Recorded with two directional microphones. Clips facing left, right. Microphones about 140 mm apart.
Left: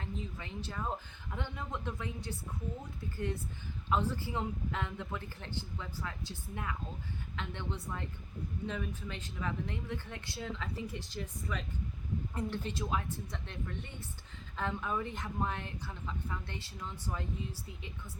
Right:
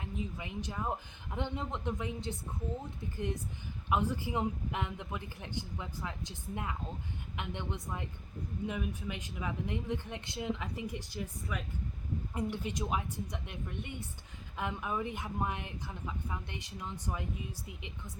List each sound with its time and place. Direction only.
0.0 s speech: 15° right (ahead or behind)
3.8 s speech: 15° right (ahead or behind)